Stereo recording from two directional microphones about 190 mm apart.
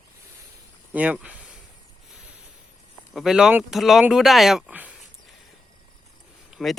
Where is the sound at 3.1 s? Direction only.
Centre (ahead or behind).